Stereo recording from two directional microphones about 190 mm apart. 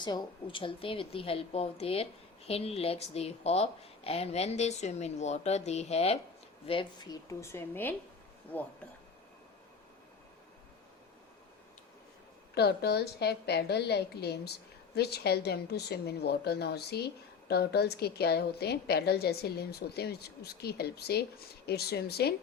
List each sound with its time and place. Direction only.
0.0 s a woman's voice: 25° left (ahead or behind)
12.5 s a woman's voice: 60° left (ahead or behind)